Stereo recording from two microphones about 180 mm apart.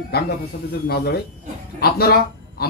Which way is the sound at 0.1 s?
65° left (ahead or behind).